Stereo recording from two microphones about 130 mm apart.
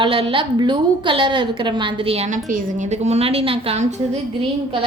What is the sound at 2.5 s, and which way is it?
A woman's voice, 60° right (ahead or behind).